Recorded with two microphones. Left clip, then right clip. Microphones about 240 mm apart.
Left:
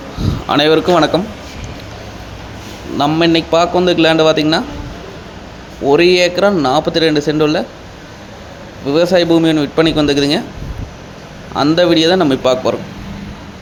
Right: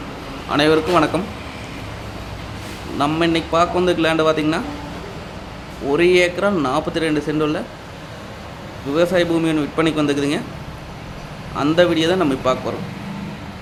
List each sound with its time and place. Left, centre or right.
0.4 s speech: left
3.0 s speech: left
5.9 s speech: centre
8.9 s speech: centre
11.5 s speech: left